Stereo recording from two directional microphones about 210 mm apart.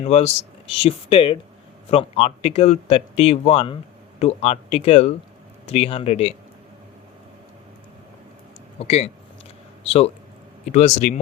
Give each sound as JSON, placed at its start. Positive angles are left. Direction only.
{"t": 0.0, "sound": "speech", "side_deg": 30}
{"t": 8.8, "sound": "speech", "side_deg": 30}